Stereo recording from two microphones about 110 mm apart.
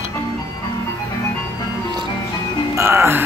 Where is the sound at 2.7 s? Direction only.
25° right (ahead or behind).